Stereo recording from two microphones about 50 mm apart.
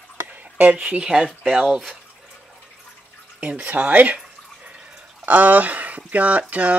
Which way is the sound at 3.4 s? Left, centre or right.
Right.